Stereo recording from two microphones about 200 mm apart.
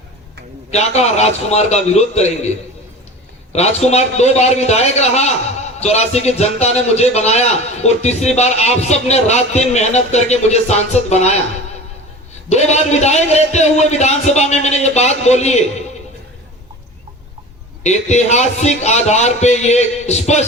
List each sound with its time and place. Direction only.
0.7 s a man's voice: 35° left (ahead or behind)
3.5 s a man's voice: 35° left (ahead or behind)
12.5 s a man's voice: 35° left (ahead or behind)
17.8 s a man's voice: 35° left (ahead or behind)